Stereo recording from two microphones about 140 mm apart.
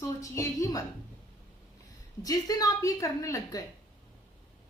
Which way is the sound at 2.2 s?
25° left (ahead or behind).